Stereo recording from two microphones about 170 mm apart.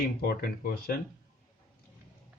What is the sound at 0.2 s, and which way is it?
Speech, 65° left (ahead or behind).